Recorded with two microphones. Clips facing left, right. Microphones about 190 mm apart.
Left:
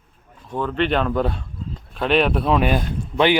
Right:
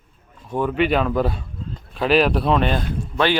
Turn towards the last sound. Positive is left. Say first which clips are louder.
# left 2 dB
turn(degrees=15)  # may be behind; listen again after turning